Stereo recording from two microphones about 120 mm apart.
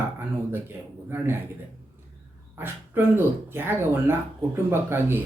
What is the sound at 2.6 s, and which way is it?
Speech, 20° right (ahead or behind).